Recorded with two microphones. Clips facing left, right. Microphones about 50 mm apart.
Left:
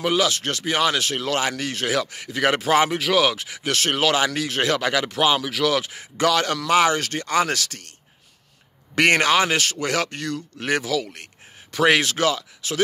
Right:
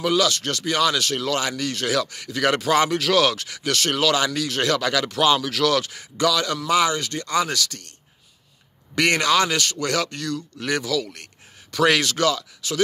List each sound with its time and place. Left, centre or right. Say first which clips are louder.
0.0 s speech: even; left
6.2 s speech: left 1 dB; left
8.9 s speech: left 2 dB; left